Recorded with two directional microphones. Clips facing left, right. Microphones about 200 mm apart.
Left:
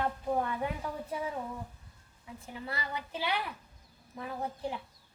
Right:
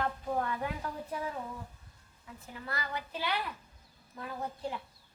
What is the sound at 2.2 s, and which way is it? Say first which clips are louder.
Speech: left 3 dB; 25° left (ahead or behind).